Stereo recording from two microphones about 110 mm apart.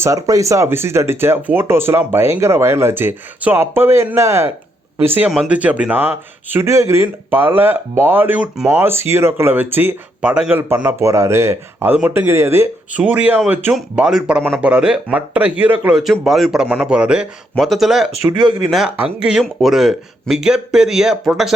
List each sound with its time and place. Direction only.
0.0 s speech: 30° right (ahead or behind)
8.5 s speech: 5° right (ahead or behind)
8.8 s speech: 20° right (ahead or behind)
13.0 s speech: 10° right (ahead or behind)
16.2 s speech: centre (ahead or behind)